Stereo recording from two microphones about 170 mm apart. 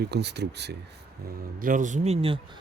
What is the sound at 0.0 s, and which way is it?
Speech, 80° right.